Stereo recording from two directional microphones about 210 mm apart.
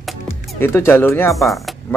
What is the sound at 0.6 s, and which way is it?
Speech, 10° left (ahead or behind).